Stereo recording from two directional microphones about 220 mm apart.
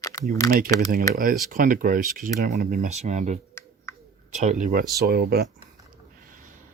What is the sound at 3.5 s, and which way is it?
Finger snapping, 10° left (ahead or behind).